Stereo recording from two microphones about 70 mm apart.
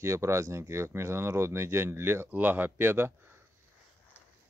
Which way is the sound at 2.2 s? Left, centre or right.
Right.